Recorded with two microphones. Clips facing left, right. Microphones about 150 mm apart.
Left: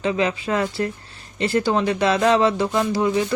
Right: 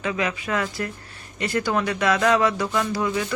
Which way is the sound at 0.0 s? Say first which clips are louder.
Left 4 dB; 30° left (ahead or behind).